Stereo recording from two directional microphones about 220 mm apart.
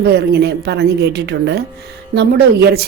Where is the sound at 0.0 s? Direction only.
50° right (ahead or behind).